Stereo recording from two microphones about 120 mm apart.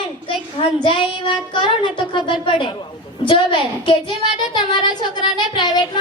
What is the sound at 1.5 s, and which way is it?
Speech, 40° left (ahead or behind).